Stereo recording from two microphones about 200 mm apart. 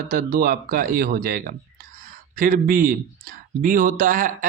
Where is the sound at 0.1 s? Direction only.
45° right (ahead or behind).